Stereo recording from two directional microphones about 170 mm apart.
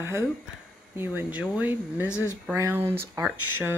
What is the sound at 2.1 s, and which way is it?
Speech, 15° left (ahead or behind).